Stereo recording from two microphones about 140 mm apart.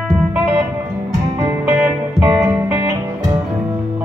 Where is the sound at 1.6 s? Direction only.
20° right (ahead or behind).